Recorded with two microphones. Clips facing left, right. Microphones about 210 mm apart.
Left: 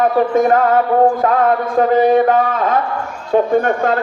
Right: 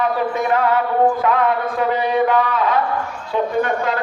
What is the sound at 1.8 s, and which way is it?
Speech, 45° left (ahead or behind).